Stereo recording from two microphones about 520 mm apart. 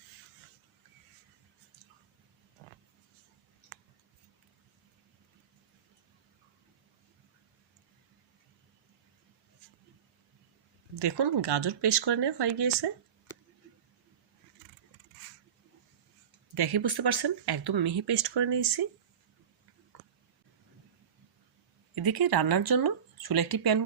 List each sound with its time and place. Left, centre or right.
11.0 s speech: right
16.6 s speech: right
21.9 s speech: right